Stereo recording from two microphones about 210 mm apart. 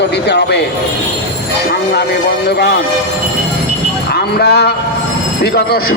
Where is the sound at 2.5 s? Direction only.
50° left (ahead or behind).